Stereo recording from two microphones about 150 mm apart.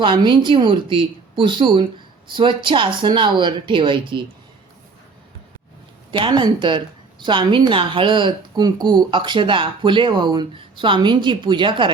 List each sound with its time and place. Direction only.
0.0 s speech: 30° right (ahead or behind)
6.1 s speech: 35° right (ahead or behind)